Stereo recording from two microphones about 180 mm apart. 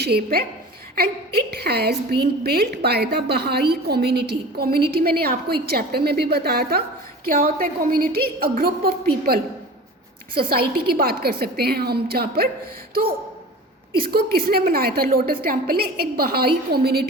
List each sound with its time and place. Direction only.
0.0 s a woman's voice: 60° right (ahead or behind)
14.0 s a woman's voice: 60° right (ahead or behind)